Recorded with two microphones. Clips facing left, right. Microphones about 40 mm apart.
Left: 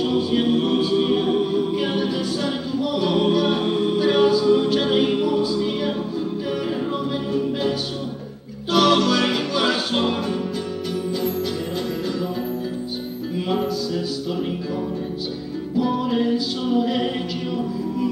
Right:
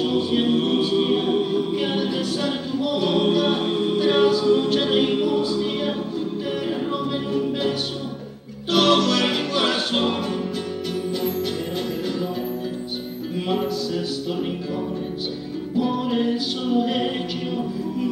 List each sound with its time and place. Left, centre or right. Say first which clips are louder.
0.0 s a capella: left 1 dB; centre
0.9 s music: left 1 dB; centre
8.7 s music: left 1 dB; centre
9.0 s music: left 1 dB; centre
9.3 s music: left 1 dB; centre
13.5 s music: even; centre
15.8 s music: left 1 dB; centre
16.7 s a capella: left 1 dB; centre